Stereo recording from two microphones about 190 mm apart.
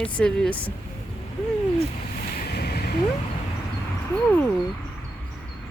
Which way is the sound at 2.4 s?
55° left (ahead or behind).